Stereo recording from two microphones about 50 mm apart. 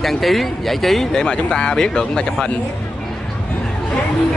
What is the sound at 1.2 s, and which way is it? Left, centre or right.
Speech, centre.